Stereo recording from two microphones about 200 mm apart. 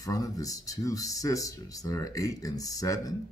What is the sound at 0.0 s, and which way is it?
Speech, 15° left (ahead or behind).